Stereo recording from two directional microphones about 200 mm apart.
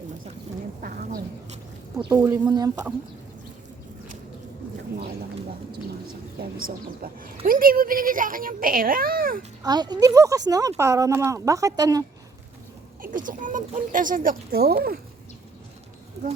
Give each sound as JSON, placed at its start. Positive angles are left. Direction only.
{"t": 0.8, "sound": "a sound", "side_deg": -45}
{"t": 2.0, "sound": "speech", "side_deg": -20}
{"t": 6.7, "sound": "speech", "side_deg": -45}
{"t": 9.6, "sound": "speech", "side_deg": -20}
{"t": 13.0, "sound": "speech", "side_deg": -40}